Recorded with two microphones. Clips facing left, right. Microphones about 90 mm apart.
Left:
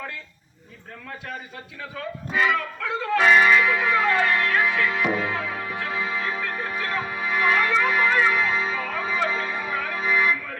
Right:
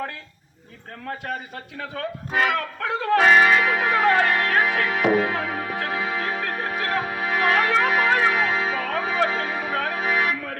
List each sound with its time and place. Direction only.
1.8 s music: 55° right (ahead or behind)